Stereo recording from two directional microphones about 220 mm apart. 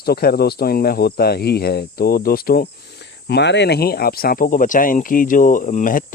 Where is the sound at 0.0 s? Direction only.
45° left (ahead or behind).